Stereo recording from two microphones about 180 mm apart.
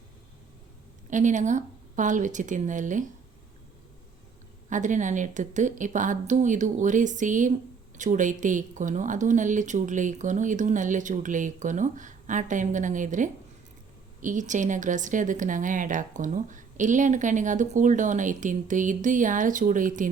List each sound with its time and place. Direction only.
1.1 s speech: 45° right (ahead or behind)
4.7 s speech: 45° right (ahead or behind)